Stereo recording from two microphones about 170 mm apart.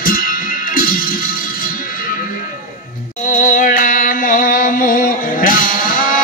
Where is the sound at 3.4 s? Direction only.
50° left (ahead or behind).